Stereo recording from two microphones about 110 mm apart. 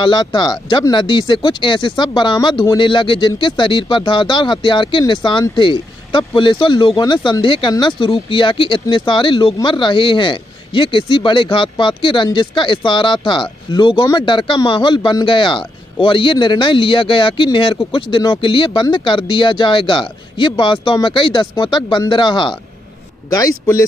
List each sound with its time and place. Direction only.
0.0 s speech: 45° left (ahead or behind)
23.3 s speech: 30° left (ahead or behind)